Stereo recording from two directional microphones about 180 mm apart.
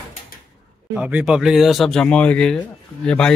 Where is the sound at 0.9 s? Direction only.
10° right (ahead or behind).